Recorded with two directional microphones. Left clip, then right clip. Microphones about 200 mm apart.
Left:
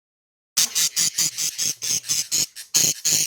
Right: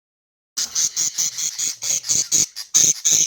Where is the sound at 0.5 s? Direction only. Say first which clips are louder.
Left 1 dB; 20° left (ahead or behind).